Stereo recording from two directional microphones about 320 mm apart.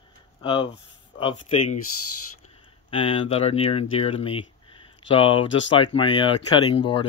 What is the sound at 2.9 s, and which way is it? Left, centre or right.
Speech, centre.